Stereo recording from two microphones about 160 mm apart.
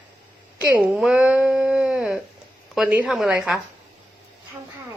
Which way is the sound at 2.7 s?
5° right (ahead or behind).